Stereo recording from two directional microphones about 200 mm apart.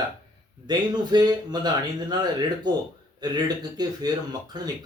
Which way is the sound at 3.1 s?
20° right (ahead or behind).